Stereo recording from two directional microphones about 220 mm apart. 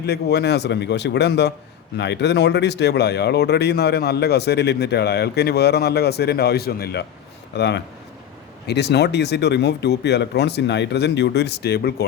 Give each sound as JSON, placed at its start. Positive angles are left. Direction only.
{"t": 0.0, "sound": "speech", "side_deg": 50}